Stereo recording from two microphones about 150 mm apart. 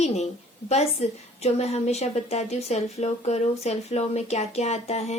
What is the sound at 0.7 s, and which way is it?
A woman's voice, 45° left (ahead or behind).